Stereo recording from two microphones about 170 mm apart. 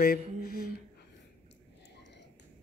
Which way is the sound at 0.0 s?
60° left (ahead or behind).